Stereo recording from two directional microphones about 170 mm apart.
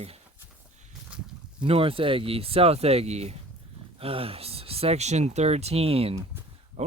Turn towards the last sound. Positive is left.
turn(degrees=-40)  # may be behind; listen again after turning